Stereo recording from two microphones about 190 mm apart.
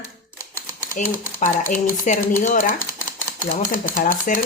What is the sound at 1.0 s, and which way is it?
Speech, 45° left (ahead or behind).